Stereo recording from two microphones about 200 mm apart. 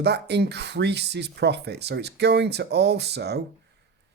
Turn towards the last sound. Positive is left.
turn(degrees=-55)  # may be behind; listen again after turning